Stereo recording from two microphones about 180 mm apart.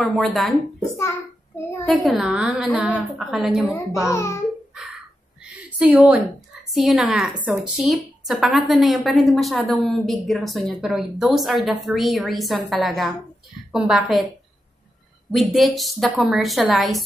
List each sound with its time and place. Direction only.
0.0 s a woman's voice: centre (ahead or behind)
1.9 s a woman's voice: centre (ahead or behind)
4.0 s a child's voice: 15° left (ahead or behind)
5.8 s a woman's voice: 5° right (ahead or behind)
15.3 s a woman's voice: centre (ahead or behind)